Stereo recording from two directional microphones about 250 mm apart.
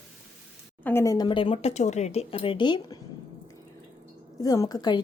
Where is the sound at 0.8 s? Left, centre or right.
Centre.